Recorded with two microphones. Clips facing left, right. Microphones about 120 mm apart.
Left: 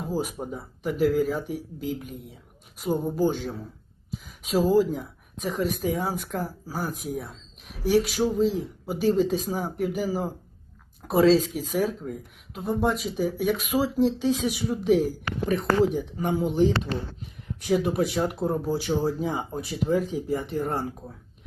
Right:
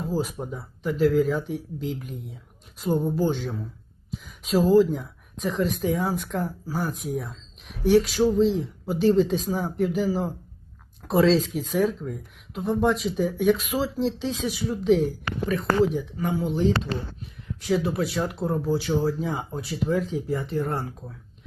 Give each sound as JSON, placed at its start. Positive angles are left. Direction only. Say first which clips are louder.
{"t": 0.0, "sound": "speech", "louder": "right 1 dB", "side_deg": 15}
{"t": 4.1, "sound": "a sound", "louder": "even", "side_deg": 0}
{"t": 4.5, "sound": "speech", "louder": "right 3 dB", "side_deg": 10}
{"t": 15.4, "sound": "speech", "louder": "even", "side_deg": 20}
{"t": 17.8, "sound": "speech", "louder": "left 1 dB", "side_deg": 15}